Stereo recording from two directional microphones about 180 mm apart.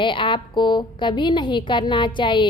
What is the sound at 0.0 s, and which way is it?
A woman's voice, 25° left (ahead or behind).